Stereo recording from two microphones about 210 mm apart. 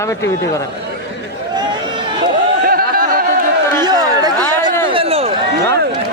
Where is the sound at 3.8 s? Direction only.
20° right (ahead or behind).